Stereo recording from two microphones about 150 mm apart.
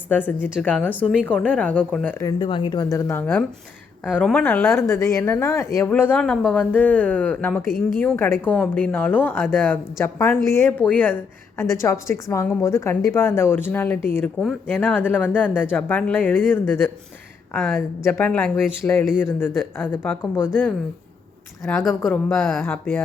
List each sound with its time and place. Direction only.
0.1 s a woman's voice: 10° left (ahead or behind)
2.4 s a woman's voice: 35° left (ahead or behind); by 20.5 s 15° left (ahead or behind)
21.6 s speech: centre (ahead or behind)
22.6 s a woman's voice: 10° left (ahead or behind)